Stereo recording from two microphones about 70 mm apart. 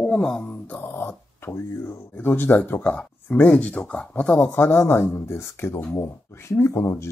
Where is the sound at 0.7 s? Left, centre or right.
Left.